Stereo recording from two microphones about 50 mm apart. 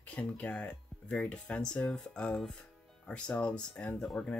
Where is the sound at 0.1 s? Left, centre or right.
Left.